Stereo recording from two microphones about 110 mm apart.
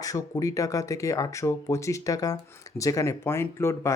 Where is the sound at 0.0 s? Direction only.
30° left (ahead or behind).